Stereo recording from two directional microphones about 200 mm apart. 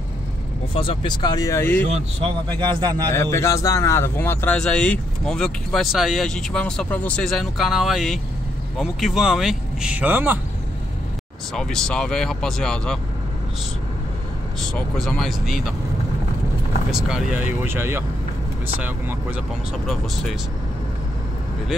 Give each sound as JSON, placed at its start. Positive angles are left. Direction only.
{"t": 0.7, "sound": "speech", "side_deg": 25}
{"t": 2.4, "sound": "a man's voice", "side_deg": -25}
{"t": 3.1, "sound": "speech", "side_deg": 15}
{"t": 11.5, "sound": "speech", "side_deg": 5}
{"t": 14.6, "sound": "speech", "side_deg": 0}
{"t": 16.9, "sound": "speech", "side_deg": -5}